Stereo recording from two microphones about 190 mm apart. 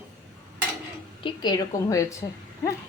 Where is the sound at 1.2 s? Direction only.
25° left (ahead or behind).